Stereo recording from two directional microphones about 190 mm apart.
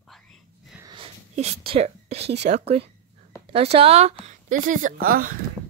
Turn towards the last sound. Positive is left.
turn(degrees=-50)  # may be behind; listen again after turning